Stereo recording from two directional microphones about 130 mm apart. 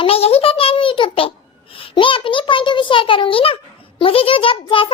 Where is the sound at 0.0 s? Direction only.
50° left (ahead or behind).